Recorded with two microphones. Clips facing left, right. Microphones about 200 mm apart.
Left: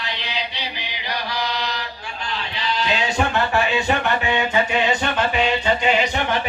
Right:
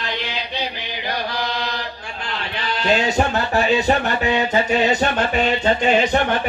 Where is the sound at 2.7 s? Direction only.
50° right (ahead or behind).